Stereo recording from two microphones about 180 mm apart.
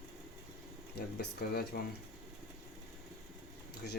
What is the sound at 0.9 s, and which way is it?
Speech, 60° left (ahead or behind).